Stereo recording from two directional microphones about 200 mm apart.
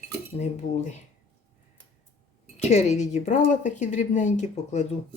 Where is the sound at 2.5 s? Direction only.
35° left (ahead or behind).